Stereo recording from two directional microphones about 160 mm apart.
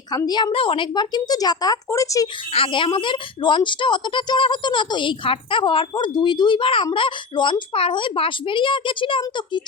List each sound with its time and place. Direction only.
0.1 s a woman's voice: 25° left (ahead or behind)
2.5 s a woman's voice: 35° left (ahead or behind)